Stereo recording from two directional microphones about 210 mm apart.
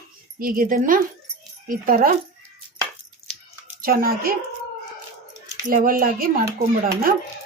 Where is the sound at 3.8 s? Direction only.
45° right (ahead or behind).